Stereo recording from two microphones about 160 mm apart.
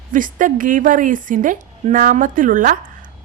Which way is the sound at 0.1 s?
55° right (ahead or behind).